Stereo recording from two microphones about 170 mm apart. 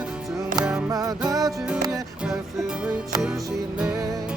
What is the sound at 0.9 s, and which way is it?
Music, 20° right (ahead or behind).